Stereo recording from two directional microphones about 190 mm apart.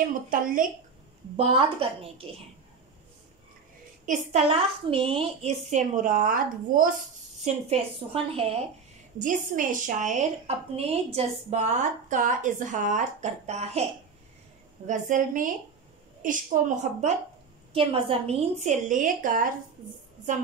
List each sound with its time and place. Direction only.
0.3 s a woman's voice: 45° right (ahead or behind)
1.3 s a woman's voice: 30° right (ahead or behind)
4.0 s a woman's voice: 40° right (ahead or behind)
5.7 s a woman's voice: 40° right (ahead or behind)
7.4 s a woman's voice: 30° right (ahead or behind)
9.2 s a woman's voice: 45° right (ahead or behind)
14.9 s a woman's voice: 45° right (ahead or behind)
17.7 s a woman's voice: 30° right (ahead or behind); by 19.4 s 45° right (ahead or behind)